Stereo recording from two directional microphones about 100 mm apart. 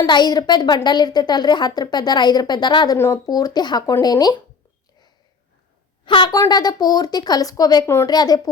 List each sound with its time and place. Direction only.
0.0 s speech: 45° left (ahead or behind)
2.9 s speech: 25° left (ahead or behind)
3.2 s speech: 40° left (ahead or behind)
6.1 s speech: 50° left (ahead or behind)